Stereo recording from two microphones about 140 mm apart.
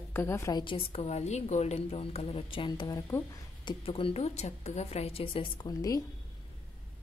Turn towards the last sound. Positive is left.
turn(degrees=25)  # may be behind; listen again after turning